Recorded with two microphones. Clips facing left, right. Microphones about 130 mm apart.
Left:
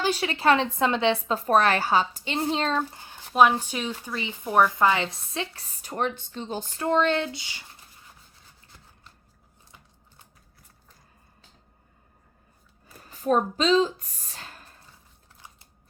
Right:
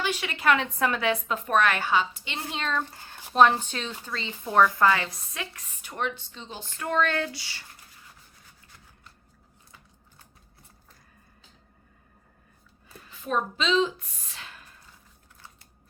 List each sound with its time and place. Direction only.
0.0 s a woman's voice: 35° left (ahead or behind)
2.9 s speech: 15° left (ahead or behind); by 6.7 s 45° left (ahead or behind)
6.7 s speech: 25° left (ahead or behind)
13.0 s speech: 40° left (ahead or behind)
15.4 s a sound: 15° left (ahead or behind)